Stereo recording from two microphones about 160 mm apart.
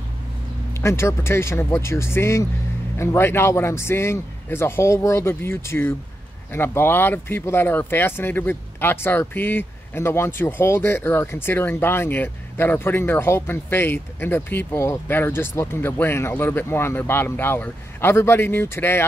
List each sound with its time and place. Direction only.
0.7 s speech: 15° left (ahead or behind)